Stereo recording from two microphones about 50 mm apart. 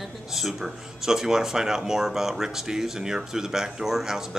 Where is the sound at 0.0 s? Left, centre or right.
Centre.